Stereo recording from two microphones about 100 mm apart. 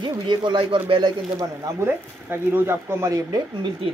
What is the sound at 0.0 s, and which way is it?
Speech, 50° right (ahead or behind).